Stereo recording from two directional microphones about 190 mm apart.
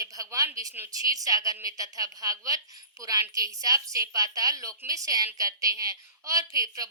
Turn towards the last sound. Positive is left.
turn(degrees=-20)  # may be behind; listen again after turning